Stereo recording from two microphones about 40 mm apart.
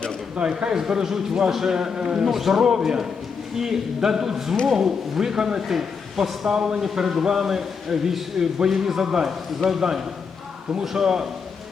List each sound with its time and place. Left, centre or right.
0.6 s a man's voice: centre
2.3 s a man's voice: centre
2.6 s a man's voice: centre
5.6 s speech: centre
6.5 s a man's voice: right